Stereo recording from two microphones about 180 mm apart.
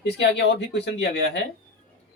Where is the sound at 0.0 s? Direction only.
70° left (ahead or behind).